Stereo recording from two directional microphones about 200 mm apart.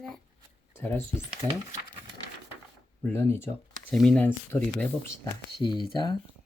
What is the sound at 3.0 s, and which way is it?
Speech, 10° left (ahead or behind).